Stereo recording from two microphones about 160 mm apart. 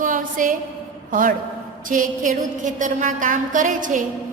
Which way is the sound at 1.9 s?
55° right (ahead or behind).